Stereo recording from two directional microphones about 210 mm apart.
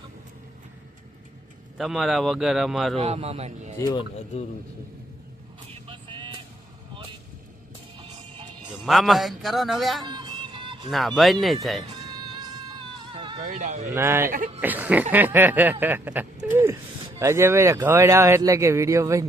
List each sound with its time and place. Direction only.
1.8 s a man's voice: centre (ahead or behind)
3.0 s speech: 30° right (ahead or behind)
3.8 s speech: 20° left (ahead or behind)
5.7 s vehicle: 25° right (ahead or behind)
8.8 s a man's voice: centre (ahead or behind)
10.0 s music: 20° right (ahead or behind)
10.9 s a man's voice: centre (ahead or behind)
11.9 s music: 20° right (ahead or behind)
13.0 s a sound: 25° right (ahead or behind)
13.4 s speech: 35° right (ahead or behind)
13.9 s speech: 10° right (ahead or behind)
14.3 s speech: 40° right (ahead or behind)
14.6 s speech: 10° right (ahead or behind)